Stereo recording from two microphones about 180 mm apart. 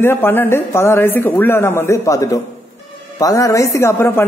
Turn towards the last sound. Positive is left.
turn(degrees=15)  # may be behind; listen again after turning